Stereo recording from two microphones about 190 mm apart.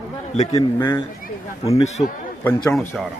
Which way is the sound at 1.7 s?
35° left (ahead or behind).